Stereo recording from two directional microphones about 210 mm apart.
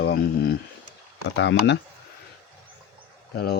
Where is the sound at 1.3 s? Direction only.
60° left (ahead or behind).